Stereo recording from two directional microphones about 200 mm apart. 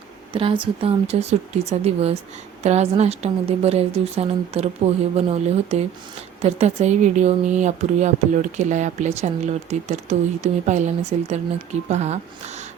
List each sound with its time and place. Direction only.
0.3 s speech: 25° right (ahead or behind)